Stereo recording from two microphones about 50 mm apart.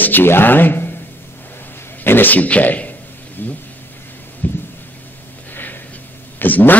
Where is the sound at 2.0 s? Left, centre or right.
Left.